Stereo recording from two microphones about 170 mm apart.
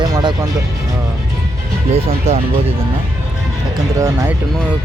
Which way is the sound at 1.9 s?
35° right (ahead or behind).